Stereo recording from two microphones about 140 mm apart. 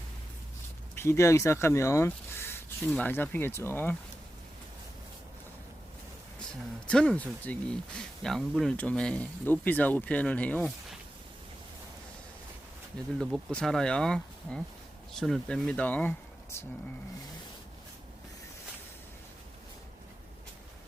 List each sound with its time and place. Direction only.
0.9 s speech: 20° left (ahead or behind)
6.8 s speech: 5° left (ahead or behind)
13.1 s speech: 5° left (ahead or behind)